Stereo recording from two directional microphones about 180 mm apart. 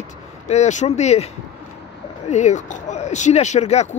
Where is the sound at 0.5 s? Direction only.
40° left (ahead or behind).